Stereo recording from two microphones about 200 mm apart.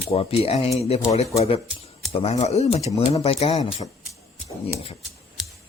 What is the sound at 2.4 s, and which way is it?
Speech, 35° left (ahead or behind).